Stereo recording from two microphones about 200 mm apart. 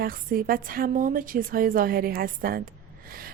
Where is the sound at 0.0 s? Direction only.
45° right (ahead or behind).